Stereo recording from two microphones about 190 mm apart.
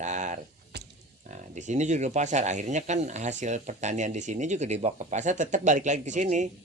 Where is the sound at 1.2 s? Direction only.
40° right (ahead or behind).